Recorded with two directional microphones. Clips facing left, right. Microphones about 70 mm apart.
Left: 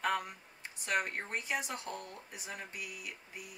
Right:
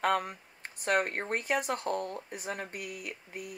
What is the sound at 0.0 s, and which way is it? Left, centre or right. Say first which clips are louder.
Speech: right 5 dB; right.